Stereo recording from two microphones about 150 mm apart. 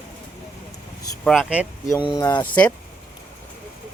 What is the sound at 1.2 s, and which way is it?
Speech, 5° right (ahead or behind).